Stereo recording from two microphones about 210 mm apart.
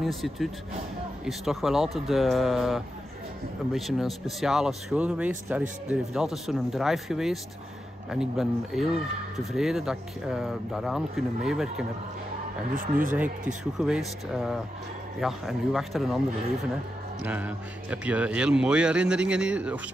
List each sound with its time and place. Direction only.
0.0 s speech: centre (ahead or behind)
12.7 s speech: 40° right (ahead or behind)
13.7 s speech: centre (ahead or behind)
17.2 s speech: 5° right (ahead or behind)